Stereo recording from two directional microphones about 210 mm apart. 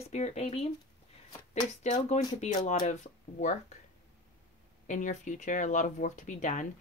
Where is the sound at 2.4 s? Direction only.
35° left (ahead or behind).